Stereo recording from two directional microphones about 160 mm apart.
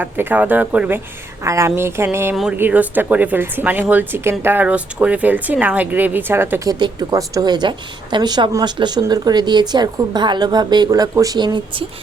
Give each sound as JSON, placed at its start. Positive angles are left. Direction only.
{"t": 0.0, "sound": "speech", "side_deg": -10}
{"t": 2.3, "sound": "a woman's voice", "side_deg": 0}